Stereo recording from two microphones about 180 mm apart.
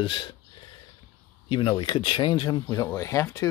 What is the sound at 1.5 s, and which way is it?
Speech, 30° left (ahead or behind).